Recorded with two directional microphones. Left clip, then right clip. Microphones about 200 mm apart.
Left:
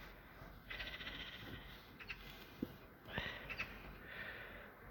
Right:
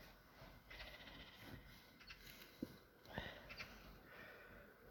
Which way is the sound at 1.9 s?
40° right (ahead or behind).